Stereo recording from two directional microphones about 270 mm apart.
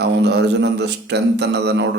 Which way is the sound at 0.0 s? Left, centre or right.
Right.